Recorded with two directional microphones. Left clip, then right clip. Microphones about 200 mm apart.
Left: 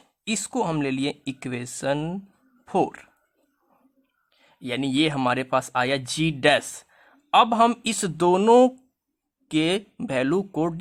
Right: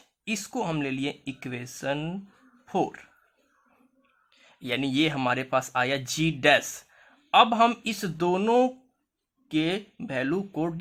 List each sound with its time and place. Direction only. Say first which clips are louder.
0.3 s speech: left 4 dB; 25° left (ahead or behind)
4.4 s speech: left 1 dB; 20° left (ahead or behind)